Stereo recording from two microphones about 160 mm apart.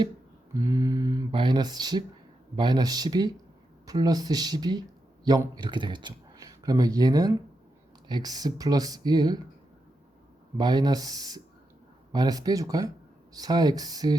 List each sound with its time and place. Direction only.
0.5 s speech: 20° right (ahead or behind)
10.6 s speech: 25° right (ahead or behind)